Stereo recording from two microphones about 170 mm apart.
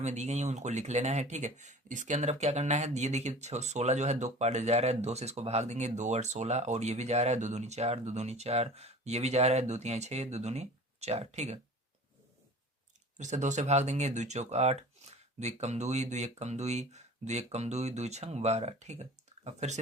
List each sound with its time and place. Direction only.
0.0 s speech: 40° right (ahead or behind)
13.1 s speech: 45° right (ahead or behind)